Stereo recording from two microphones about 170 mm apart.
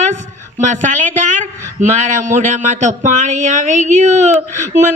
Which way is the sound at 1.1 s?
45° right (ahead or behind).